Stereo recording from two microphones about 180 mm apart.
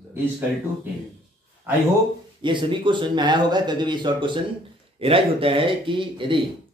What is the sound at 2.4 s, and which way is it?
Speech, 25° right (ahead or behind).